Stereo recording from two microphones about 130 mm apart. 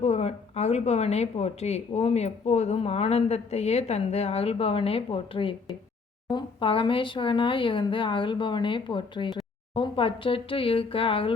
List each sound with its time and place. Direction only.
0.0 s speech: 55° left (ahead or behind)